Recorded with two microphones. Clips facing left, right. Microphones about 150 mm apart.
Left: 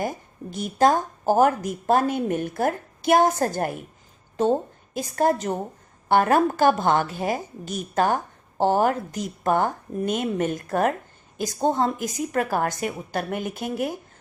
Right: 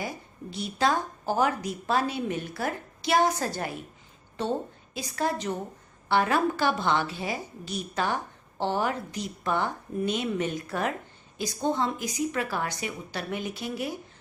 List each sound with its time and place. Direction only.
0.0 s a woman's voice: 50° left (ahead or behind)
4.9 s a woman's voice: 50° left (ahead or behind)